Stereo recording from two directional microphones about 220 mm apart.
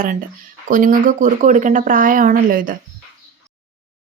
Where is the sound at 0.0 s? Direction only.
40° right (ahead or behind).